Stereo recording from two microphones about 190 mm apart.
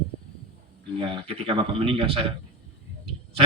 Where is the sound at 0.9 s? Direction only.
30° right (ahead or behind).